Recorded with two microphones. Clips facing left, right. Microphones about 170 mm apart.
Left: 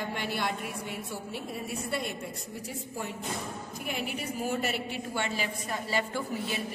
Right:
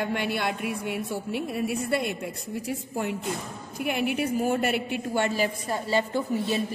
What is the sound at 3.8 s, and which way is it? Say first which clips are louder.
A woman's voice: right 9 dB; 65° right (ahead or behind).